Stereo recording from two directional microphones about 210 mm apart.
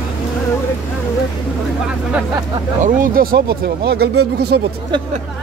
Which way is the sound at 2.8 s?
40° right (ahead or behind).